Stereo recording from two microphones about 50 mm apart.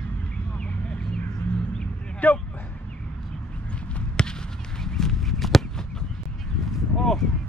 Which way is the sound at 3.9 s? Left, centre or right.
Centre.